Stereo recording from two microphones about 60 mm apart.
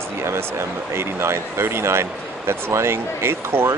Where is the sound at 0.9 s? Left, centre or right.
Right.